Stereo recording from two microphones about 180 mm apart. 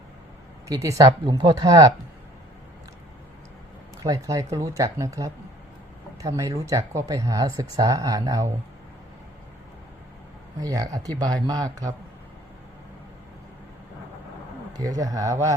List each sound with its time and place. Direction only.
0.7 s speech: 20° right (ahead or behind)
4.0 s speech: 20° right (ahead or behind)
10.6 s speech: 20° right (ahead or behind)
14.7 s speech: 20° right (ahead or behind)